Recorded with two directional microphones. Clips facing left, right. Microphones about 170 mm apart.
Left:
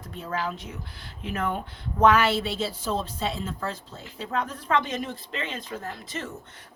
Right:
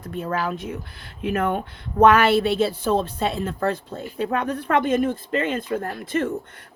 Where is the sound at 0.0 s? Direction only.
55° right (ahead or behind).